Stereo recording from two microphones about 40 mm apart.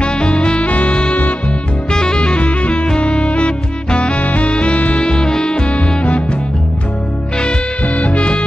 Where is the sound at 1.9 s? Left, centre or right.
Left.